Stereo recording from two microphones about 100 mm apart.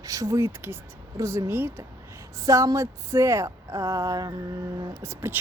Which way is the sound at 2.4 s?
35° right (ahead or behind).